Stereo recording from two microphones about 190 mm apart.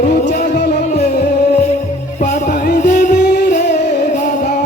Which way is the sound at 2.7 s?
40° left (ahead or behind).